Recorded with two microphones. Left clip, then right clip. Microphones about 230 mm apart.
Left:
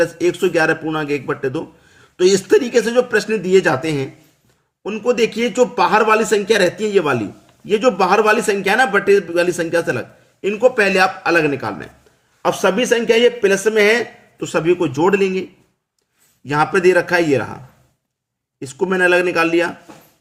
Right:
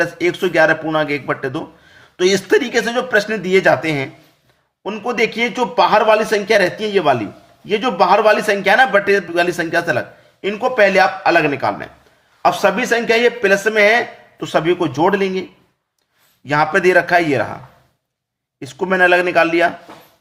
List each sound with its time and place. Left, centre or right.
0.0 s a man's voice: centre
16.5 s a man's voice: centre
18.6 s a man's voice: centre